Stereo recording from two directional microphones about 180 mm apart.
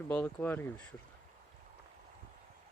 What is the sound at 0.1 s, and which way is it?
Speech, 10° left (ahead or behind).